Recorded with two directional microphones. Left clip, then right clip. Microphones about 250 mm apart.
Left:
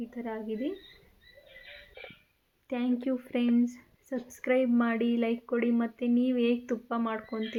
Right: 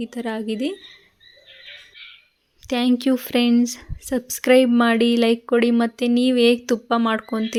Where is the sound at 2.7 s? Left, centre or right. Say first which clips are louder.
Right 11 dB; right.